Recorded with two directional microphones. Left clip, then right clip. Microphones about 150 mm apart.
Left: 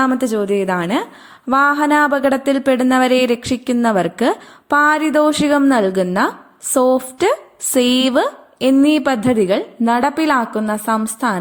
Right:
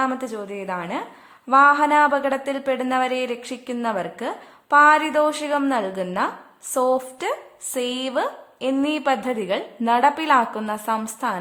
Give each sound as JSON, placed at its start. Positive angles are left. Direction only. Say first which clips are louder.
{"t": 0.0, "sound": "a woman's voice", "louder": "left 8 dB", "side_deg": 35}